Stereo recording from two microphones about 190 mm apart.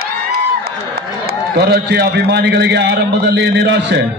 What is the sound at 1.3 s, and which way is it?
A man's voice, 55° right (ahead or behind).